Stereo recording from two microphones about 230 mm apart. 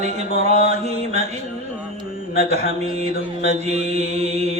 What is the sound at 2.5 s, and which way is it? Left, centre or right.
Mantra, right.